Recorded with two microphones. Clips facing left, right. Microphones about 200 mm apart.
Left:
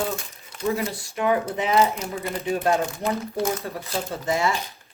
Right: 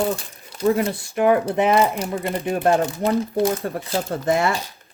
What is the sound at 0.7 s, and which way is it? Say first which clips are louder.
Speech: right 6 dB; 50° right (ahead or behind).